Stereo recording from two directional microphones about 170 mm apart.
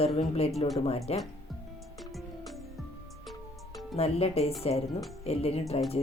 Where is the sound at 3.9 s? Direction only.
35° left (ahead or behind).